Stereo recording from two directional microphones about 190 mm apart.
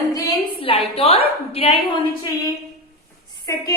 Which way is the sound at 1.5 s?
30° left (ahead or behind).